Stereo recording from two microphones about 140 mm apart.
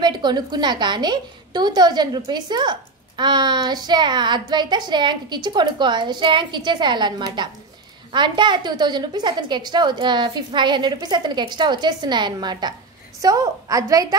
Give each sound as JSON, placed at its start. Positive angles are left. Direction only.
{"t": 0.0, "sound": "a woman's voice", "side_deg": -30}